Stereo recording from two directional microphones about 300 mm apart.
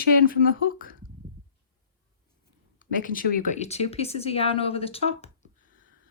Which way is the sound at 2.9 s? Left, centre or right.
Left.